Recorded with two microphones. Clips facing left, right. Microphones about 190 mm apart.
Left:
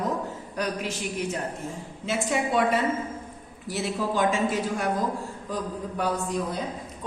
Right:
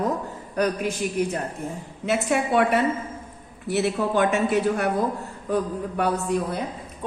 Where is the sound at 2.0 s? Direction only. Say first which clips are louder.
Right 4 dB; 65° right (ahead or behind).